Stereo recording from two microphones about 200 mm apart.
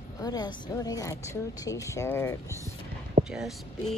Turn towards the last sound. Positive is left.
turn(degrees=0)  # may be behind; listen again after turning